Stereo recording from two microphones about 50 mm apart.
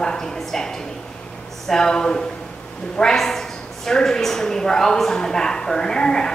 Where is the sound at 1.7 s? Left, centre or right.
Centre.